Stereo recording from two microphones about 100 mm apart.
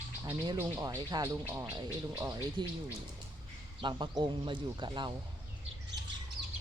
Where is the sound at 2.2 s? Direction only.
45° right (ahead or behind).